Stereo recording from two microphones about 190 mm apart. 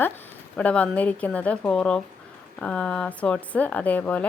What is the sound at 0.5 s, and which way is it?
A woman's voice, 5° left (ahead or behind).